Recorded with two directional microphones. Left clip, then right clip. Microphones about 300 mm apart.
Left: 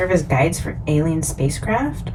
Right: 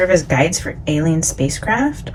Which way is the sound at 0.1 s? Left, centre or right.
Right.